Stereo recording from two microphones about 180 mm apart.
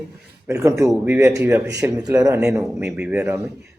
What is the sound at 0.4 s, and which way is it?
Speech, 15° right (ahead or behind).